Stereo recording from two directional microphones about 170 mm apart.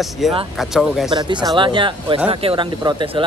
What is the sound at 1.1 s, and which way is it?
Speech, 25° right (ahead or behind).